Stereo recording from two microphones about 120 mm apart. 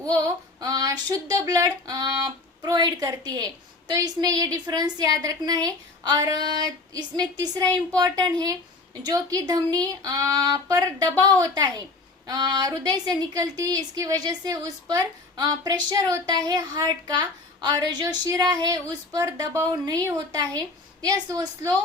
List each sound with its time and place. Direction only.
0.6 s a woman's voice: 30° right (ahead or behind)